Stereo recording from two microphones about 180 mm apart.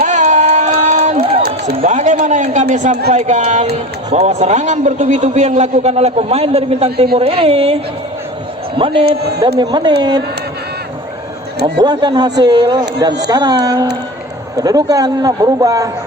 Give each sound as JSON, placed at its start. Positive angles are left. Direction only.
{"t": 0.0, "sound": "a sound", "side_deg": -45}
{"t": 1.5, "sound": "a man's voice", "side_deg": -35}
{"t": 8.8, "sound": "a man's voice", "side_deg": -30}
{"t": 9.0, "sound": "a man's voice", "side_deg": -65}
{"t": 9.6, "sound": "a man's voice", "side_deg": -25}
{"t": 11.8, "sound": "a man's voice", "side_deg": -25}